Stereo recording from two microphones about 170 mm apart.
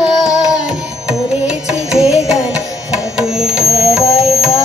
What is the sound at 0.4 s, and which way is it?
Carnatic music, 5° right (ahead or behind).